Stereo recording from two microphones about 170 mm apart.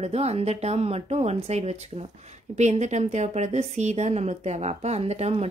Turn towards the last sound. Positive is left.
turn(degrees=-40)  # may be behind; listen again after turning